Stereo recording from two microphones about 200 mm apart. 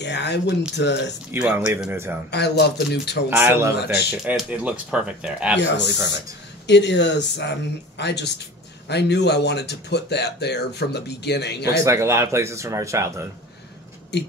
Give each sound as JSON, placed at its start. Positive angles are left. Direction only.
{"t": 0.0, "sound": "speech", "side_deg": 60}
{"t": 1.3, "sound": "speech", "side_deg": -10}
{"t": 2.3, "sound": "speech", "side_deg": 55}
{"t": 3.3, "sound": "speech", "side_deg": -10}
{"t": 3.7, "sound": "speech", "side_deg": 55}
{"t": 4.1, "sound": "speech", "side_deg": -5}
{"t": 6.7, "sound": "speech", "side_deg": 60}
{"t": 11.8, "sound": "speech", "side_deg": -15}